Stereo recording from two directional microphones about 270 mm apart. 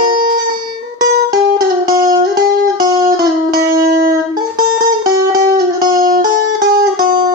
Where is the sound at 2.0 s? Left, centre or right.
Right.